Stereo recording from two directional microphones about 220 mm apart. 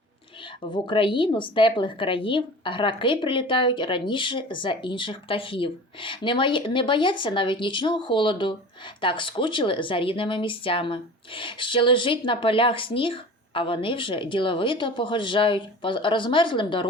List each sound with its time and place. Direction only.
0.7 s a woman's voice: 25° left (ahead or behind)